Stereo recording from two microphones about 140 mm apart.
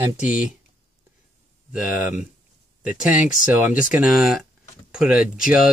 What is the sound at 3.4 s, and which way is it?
Speech, 10° right (ahead or behind).